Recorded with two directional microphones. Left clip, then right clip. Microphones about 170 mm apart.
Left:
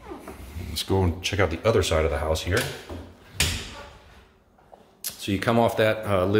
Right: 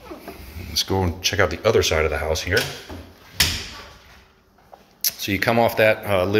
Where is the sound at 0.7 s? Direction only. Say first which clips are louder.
Right 3 dB; 20° left (ahead or behind).